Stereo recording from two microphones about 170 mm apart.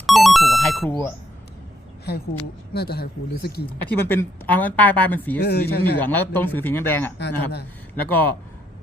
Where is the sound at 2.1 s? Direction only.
75° left (ahead or behind).